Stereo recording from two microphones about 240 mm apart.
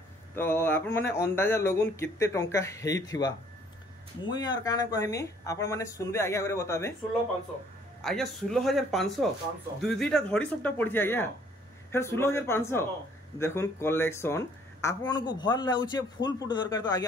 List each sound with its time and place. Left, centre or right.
0.4 s a woman's voice: centre
8.0 s a woman's voice: centre